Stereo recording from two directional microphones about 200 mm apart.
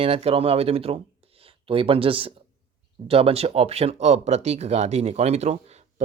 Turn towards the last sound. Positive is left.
turn(degrees=-30)  # may be behind; listen again after turning